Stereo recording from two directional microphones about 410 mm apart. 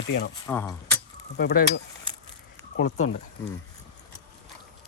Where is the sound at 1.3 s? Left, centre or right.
Left.